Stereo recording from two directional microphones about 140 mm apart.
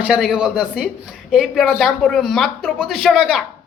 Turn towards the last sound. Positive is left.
turn(degrees=-5)  # may be behind; listen again after turning